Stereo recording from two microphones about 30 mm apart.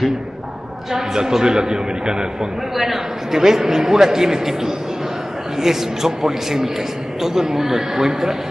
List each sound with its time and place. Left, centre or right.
0.9 s a man's voice: centre
2.7 s a man's voice: centre